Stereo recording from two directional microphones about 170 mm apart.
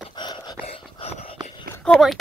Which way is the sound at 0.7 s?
35° left (ahead or behind).